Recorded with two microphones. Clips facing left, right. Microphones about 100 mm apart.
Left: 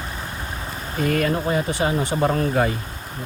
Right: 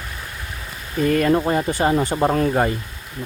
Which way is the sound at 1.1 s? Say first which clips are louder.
Right 4 dB; 40° right (ahead or behind).